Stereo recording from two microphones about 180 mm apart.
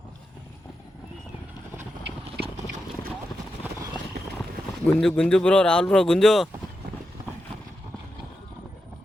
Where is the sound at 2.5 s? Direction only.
45° right (ahead or behind).